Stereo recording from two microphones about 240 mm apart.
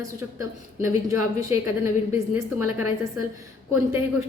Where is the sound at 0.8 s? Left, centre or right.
Centre.